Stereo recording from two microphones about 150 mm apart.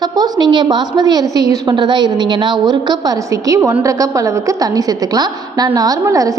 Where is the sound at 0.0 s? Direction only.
30° right (ahead or behind).